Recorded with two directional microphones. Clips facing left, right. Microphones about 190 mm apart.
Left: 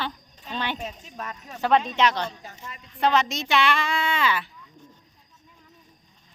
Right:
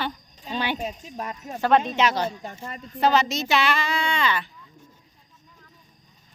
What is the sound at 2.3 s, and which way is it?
Speech, 50° right (ahead or behind).